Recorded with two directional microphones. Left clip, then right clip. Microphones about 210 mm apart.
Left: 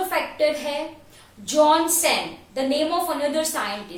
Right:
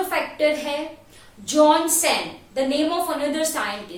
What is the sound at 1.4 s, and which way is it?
Speech, 10° right (ahead or behind).